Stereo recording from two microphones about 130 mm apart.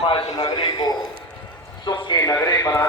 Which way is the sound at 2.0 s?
35° left (ahead or behind).